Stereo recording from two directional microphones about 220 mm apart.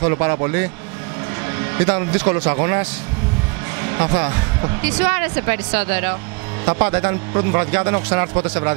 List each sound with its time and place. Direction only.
0.0 s speech: 20° right (ahead or behind)
1.8 s speech: 20° right (ahead or behind)
3.8 s speech: 20° right (ahead or behind)
6.6 s speech: 25° right (ahead or behind)